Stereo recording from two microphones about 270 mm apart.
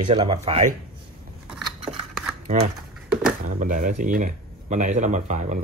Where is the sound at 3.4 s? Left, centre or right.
Right.